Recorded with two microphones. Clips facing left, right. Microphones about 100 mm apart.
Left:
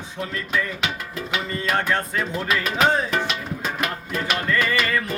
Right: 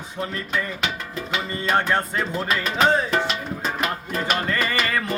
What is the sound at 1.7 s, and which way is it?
Music, 20° right (ahead or behind).